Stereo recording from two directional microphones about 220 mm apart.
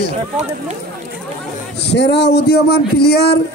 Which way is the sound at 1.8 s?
50° left (ahead or behind).